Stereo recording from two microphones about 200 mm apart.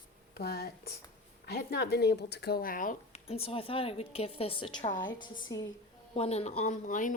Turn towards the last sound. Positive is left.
turn(degrees=40)  # may be behind; listen again after turning